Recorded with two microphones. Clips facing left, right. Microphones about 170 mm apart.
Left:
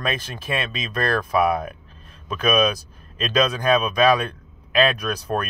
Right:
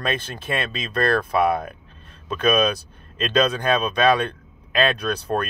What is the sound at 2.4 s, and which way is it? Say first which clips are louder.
Speech: even; 30° right (ahead or behind).